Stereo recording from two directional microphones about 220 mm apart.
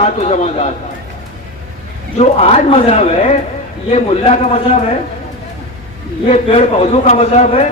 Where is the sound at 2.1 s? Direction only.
30° left (ahead or behind).